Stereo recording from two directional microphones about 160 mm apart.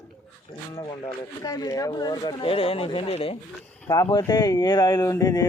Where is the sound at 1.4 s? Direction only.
25° left (ahead or behind).